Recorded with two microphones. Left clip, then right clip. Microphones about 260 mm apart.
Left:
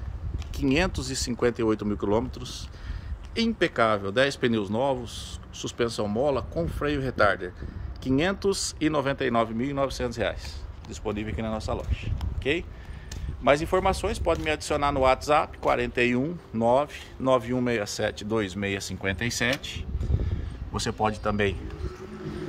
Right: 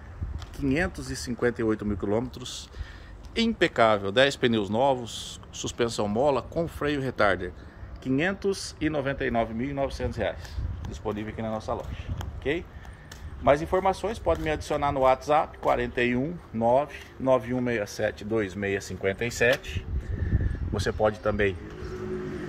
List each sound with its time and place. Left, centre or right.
0.6 s speech: centre
8.0 s speech: centre
20.7 s speech: centre